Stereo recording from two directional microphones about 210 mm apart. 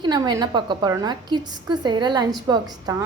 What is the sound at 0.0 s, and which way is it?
A woman's voice, 20° right (ahead or behind).